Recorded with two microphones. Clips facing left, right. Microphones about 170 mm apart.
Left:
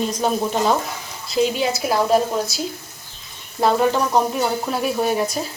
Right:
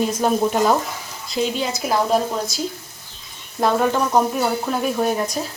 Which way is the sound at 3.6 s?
Centre (ahead or behind).